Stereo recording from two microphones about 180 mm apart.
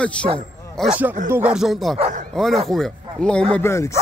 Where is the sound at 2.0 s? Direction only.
45° right (ahead or behind).